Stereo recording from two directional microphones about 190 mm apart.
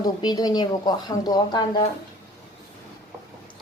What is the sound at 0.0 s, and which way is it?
A woman's voice, 20° left (ahead or behind).